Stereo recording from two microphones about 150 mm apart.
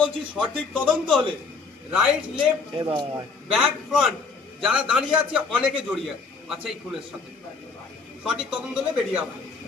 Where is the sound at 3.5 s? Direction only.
Centre (ahead or behind).